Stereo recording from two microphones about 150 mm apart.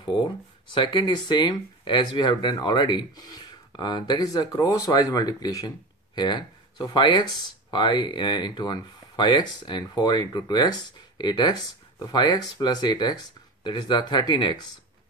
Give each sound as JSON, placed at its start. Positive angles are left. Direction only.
{"t": 0.0, "sound": "speech", "side_deg": 30}